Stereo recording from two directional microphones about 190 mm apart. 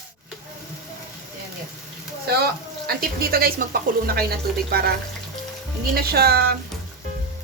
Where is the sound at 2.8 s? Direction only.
55° right (ahead or behind).